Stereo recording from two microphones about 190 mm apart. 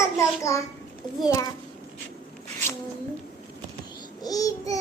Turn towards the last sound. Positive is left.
turn(degrees=20)  # may be behind; listen again after turning